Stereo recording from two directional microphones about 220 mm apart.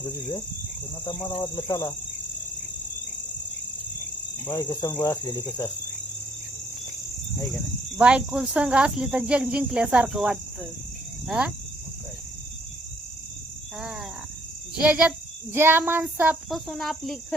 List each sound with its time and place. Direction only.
0.0 s cricket: 15° left (ahead or behind)
1.0 s speech: 20° left (ahead or behind)
4.4 s cricket: 15° left (ahead or behind)
7.5 s speech: 5° right (ahead or behind)
13.7 s speech: 5° right (ahead or behind)